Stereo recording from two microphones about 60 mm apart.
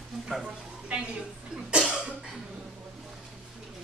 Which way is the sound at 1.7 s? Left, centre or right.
Centre.